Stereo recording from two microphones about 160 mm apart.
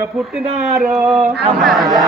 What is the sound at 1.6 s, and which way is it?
Mantra, centre (ahead or behind).